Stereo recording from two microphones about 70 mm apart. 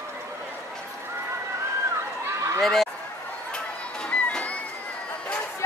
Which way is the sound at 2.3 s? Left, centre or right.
Right.